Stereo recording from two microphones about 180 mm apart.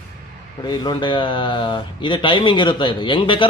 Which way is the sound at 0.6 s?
25° left (ahead or behind).